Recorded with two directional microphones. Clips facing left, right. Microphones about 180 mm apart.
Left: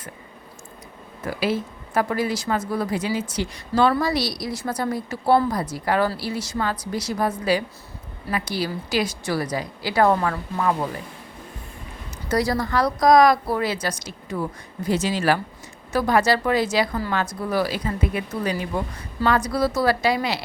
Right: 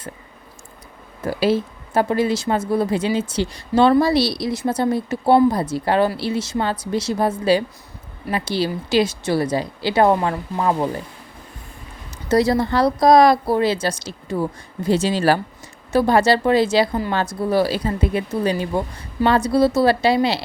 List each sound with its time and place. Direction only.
1.2 s speech: 30° right (ahead or behind)
12.3 s speech: 25° right (ahead or behind)